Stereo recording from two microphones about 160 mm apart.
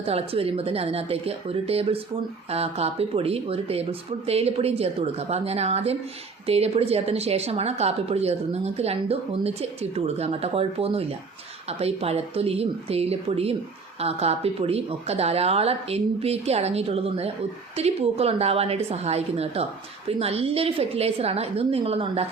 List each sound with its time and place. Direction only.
0.0 s speech: 40° right (ahead or behind)